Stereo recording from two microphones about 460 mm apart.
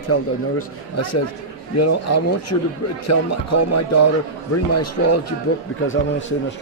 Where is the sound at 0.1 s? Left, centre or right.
Left.